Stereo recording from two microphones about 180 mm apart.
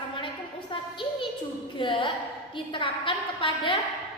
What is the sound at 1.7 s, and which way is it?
A woman's voice, 25° left (ahead or behind).